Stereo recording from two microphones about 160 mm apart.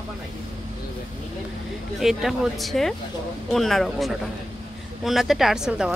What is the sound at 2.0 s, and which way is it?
Speech, centre (ahead or behind).